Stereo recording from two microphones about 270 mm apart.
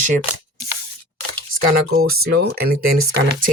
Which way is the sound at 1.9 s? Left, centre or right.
Right.